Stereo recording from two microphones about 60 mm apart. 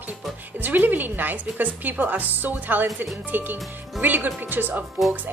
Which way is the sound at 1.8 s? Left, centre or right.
Right.